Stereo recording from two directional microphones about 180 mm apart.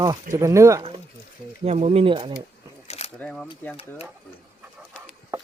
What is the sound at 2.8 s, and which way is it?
Camera, 35° left (ahead or behind).